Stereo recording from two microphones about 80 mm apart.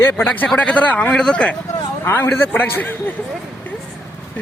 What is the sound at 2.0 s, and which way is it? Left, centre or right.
Speech, left.